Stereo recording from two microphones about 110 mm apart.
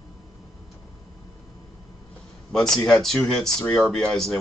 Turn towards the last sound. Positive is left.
turn(degrees=5)  # may be behind; listen again after turning